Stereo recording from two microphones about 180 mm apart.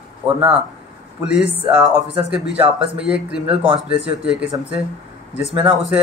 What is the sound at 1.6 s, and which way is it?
Speech, 10° right (ahead or behind).